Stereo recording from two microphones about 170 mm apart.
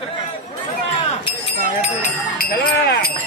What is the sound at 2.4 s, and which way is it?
Speech, 65° left (ahead or behind).